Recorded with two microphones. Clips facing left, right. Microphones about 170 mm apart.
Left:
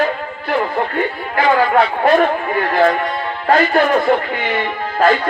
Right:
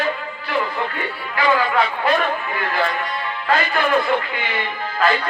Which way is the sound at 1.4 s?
45° left (ahead or behind).